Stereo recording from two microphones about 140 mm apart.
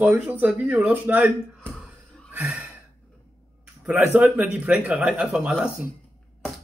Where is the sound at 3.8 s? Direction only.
15° right (ahead or behind).